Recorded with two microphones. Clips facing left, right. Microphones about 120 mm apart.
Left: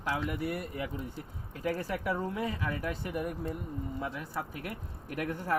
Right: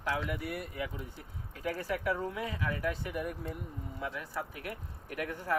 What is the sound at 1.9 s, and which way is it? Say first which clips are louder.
Speech: even; 35° left (ahead or behind).